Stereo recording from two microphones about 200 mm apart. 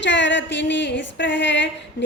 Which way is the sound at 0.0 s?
65° left (ahead or behind).